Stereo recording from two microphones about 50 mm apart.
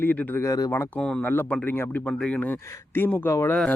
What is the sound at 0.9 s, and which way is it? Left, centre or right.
Speech, centre.